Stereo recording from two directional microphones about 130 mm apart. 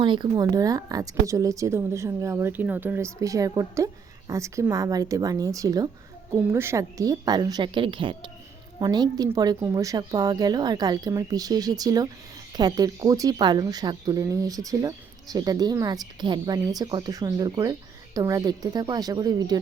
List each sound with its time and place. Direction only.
0.0 s a woman's voice: 40° right (ahead or behind)